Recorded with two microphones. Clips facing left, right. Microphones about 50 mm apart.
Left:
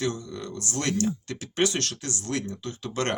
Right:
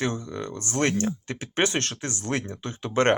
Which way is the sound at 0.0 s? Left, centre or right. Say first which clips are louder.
Right 1 dB; right.